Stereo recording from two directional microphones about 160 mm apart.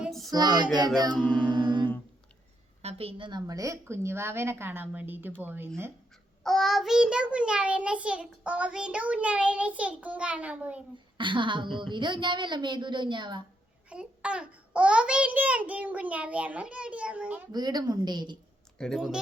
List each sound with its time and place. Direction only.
0.0 s child singing: centre (ahead or behind)
0.3 s a woman's voice: 25° right (ahead or behind)
1.1 s music: 10° left (ahead or behind)
1.4 s mantra: 30° right (ahead or behind)
2.8 s child singing: 35° right (ahead or behind); by 5.9 s 15° right (ahead or behind)
6.4 s child singing: centre (ahead or behind)
11.2 s a woman's voice: 30° right (ahead or behind)
13.9 s child singing: 5° right (ahead or behind)
17.5 s a woman's voice: 25° right (ahead or behind)
18.8 s speech: centre (ahead or behind)